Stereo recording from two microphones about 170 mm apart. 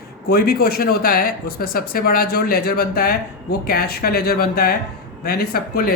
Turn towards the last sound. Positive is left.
turn(degrees=60)  # may be behind; listen again after turning